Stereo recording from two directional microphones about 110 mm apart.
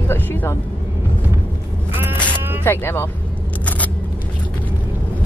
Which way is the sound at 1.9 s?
20° right (ahead or behind).